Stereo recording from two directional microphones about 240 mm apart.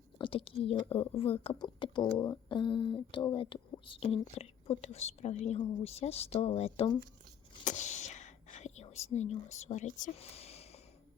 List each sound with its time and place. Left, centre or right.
0.2 s speech: left